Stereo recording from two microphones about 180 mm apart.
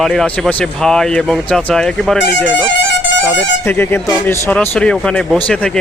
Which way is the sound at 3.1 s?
85° left.